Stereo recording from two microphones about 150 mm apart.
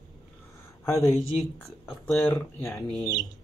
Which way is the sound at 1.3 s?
5° left (ahead or behind).